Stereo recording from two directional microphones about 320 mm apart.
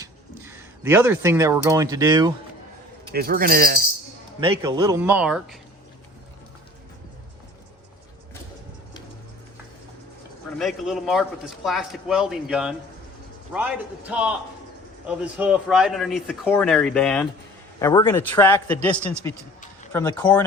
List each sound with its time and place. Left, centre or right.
0.0 s speech: centre
3.1 s speech: right
4.4 s speech: centre
10.6 s a man's voice: centre